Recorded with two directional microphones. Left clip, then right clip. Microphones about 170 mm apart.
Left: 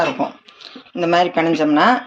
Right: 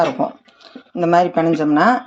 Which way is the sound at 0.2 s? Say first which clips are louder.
Right 1 dB; 45° right (ahead or behind).